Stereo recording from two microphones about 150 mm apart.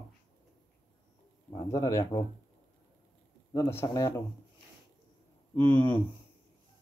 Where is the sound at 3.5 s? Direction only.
20° left (ahead or behind).